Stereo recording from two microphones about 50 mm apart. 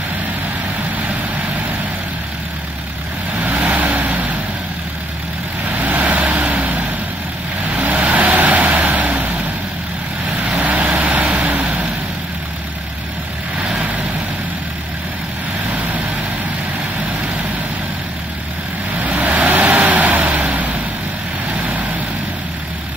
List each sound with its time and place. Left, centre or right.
3.3 s vehicle: right
5.8 s vehicle: right
10.6 s vehicle: right
18.9 s vehicle: right